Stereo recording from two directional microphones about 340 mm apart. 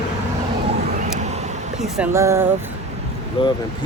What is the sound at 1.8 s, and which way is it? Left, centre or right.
Speech, centre.